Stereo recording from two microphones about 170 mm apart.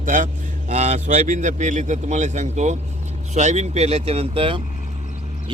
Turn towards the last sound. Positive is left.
turn(degrees=-30)  # may be behind; listen again after turning